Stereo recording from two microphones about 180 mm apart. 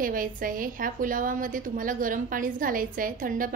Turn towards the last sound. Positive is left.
turn(degrees=-50)  # may be behind; listen again after turning